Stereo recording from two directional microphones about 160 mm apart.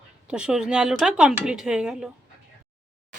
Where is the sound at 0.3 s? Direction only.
5° right (ahead or behind).